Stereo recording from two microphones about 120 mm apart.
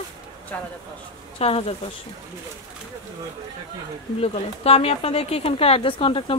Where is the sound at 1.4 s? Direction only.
55° left (ahead or behind).